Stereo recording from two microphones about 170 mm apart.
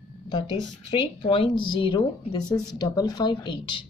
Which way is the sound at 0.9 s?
30° left (ahead or behind).